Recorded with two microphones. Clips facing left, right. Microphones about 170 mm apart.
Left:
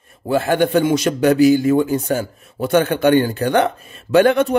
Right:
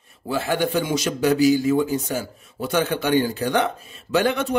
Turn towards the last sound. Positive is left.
turn(degrees=60)  # may be behind; listen again after turning